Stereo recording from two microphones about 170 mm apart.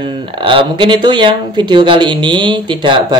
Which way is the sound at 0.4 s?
30° right (ahead or behind).